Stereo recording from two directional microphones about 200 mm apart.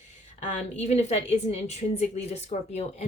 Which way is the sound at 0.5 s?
35° left (ahead or behind).